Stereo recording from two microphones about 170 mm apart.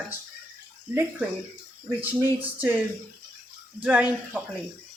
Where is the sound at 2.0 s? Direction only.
10° right (ahead or behind).